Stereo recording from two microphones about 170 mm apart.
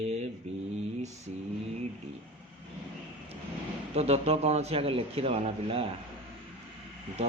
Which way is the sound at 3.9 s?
35° right (ahead or behind).